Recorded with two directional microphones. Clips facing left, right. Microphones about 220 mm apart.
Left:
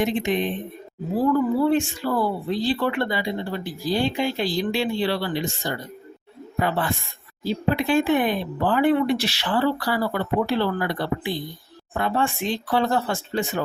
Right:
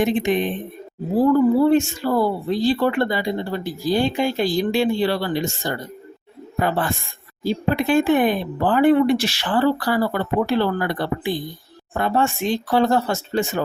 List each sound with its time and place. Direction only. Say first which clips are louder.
0.0 s speech: right 3 dB; 50° right (ahead or behind)
1.7 s speech: right 4 dB; 45° right (ahead or behind)